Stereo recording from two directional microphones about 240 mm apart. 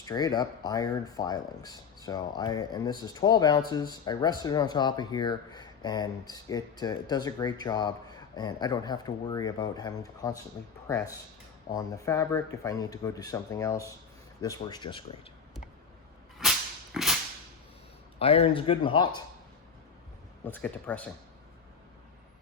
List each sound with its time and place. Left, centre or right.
0.0 s speech: centre
16.4 s whip: centre
18.2 s speech: left
20.4 s speech: centre